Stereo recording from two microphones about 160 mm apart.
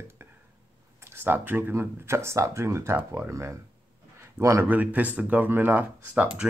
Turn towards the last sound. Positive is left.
turn(degrees=-10)  # may be behind; listen again after turning